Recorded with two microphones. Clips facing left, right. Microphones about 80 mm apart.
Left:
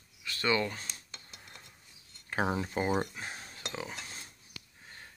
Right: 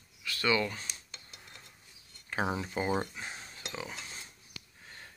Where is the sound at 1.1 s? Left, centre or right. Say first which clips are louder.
Left 1 dB; left.